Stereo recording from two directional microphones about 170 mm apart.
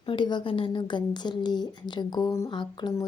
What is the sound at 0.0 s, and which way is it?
A woman's voice, 30° left (ahead or behind).